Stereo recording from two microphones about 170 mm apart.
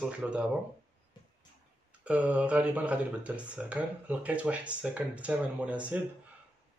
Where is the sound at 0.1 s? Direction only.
5° right (ahead or behind).